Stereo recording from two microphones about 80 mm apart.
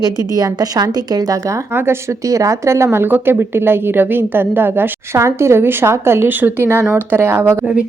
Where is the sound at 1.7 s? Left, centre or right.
Right.